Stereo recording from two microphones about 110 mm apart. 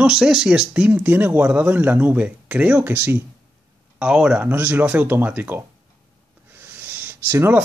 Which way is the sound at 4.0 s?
10° right (ahead or behind).